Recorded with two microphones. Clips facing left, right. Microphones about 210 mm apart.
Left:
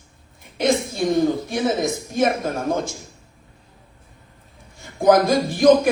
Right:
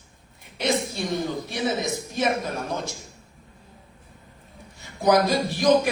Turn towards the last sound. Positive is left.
turn(degrees=50)  # may be behind; listen again after turning